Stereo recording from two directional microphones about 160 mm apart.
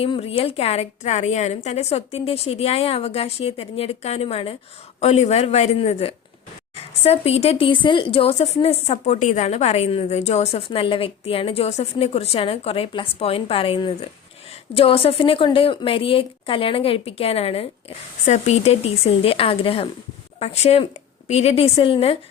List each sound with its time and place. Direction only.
0.0 s a woman's voice: 35° left (ahead or behind)